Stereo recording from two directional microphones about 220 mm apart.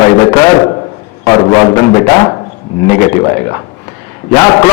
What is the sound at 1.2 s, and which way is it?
A man's voice, 20° left (ahead or behind).